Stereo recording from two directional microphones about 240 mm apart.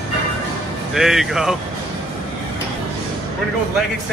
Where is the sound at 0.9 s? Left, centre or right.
Centre.